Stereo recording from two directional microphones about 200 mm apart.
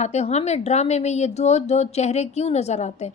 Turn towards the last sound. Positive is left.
turn(degrees=35)  # may be behind; listen again after turning